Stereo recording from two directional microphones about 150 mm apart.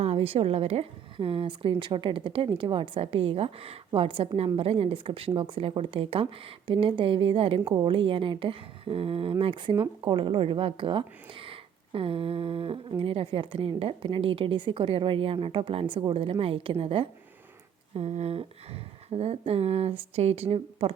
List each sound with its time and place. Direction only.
0.0 s a woman's voice: 40° right (ahead or behind)